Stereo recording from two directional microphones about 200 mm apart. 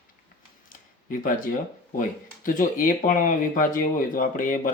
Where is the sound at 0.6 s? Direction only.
45° left (ahead or behind).